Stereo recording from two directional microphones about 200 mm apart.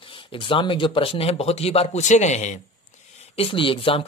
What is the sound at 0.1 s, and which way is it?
Speech, 25° left (ahead or behind).